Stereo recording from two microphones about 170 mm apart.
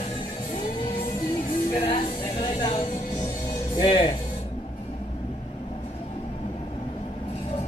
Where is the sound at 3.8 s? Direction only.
30° left (ahead or behind).